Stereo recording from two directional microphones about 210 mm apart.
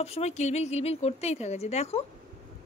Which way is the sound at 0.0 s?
30° left (ahead or behind).